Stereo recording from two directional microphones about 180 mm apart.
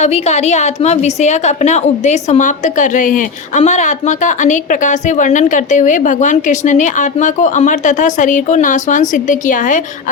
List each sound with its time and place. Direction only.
0.0 s a woman's voice: 40° left (ahead or behind)